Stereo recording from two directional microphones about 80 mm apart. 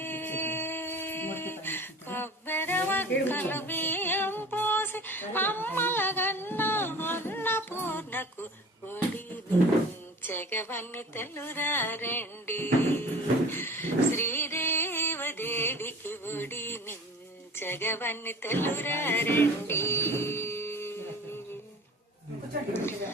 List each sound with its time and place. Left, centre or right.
0.0 s a sound: left
17.6 s music: left
22.7 s a woman's voice: left